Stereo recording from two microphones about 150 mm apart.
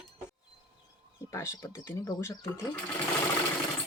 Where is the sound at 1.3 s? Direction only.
20° left (ahead or behind).